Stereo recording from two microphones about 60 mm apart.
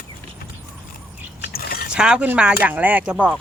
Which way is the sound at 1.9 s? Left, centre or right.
Centre.